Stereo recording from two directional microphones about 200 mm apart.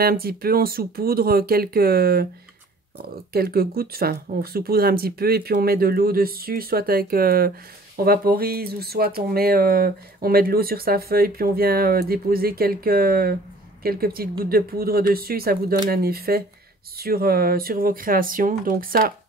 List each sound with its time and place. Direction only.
0.0 s speech: 50° right (ahead or behind)
3.3 s speech: 50° right (ahead or behind)